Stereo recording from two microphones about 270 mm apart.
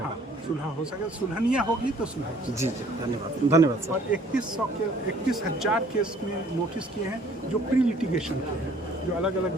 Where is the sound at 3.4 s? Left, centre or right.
Centre.